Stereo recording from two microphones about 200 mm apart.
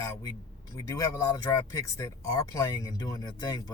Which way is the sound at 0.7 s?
15° left (ahead or behind).